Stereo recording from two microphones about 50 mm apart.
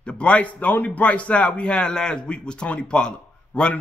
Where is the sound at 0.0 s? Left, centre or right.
Left.